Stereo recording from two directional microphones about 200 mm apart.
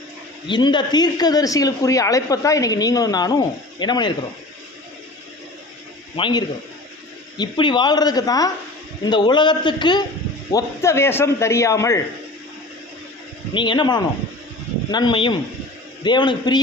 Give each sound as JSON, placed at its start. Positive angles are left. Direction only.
{"t": 0.4, "sound": "speech", "side_deg": 20}
{"t": 6.1, "sound": "a man's voice", "side_deg": 25}
{"t": 13.5, "sound": "speech", "side_deg": 25}